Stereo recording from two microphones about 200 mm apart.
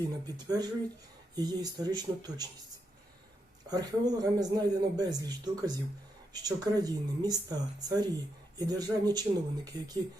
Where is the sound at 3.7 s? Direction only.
20° right (ahead or behind).